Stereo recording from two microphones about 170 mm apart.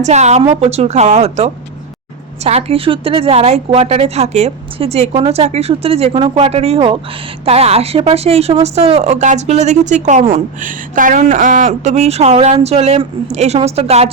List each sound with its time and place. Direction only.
0.0 s a woman's voice: 40° right (ahead or behind)